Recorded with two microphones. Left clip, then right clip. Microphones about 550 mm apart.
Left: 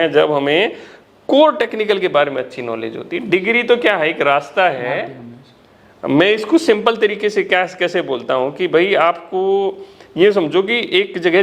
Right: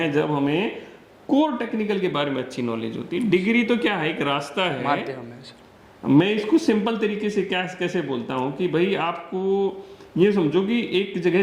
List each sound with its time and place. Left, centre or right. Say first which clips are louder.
0.0 s speech: left 9 dB; left
6.1 s speech: left 6 dB; left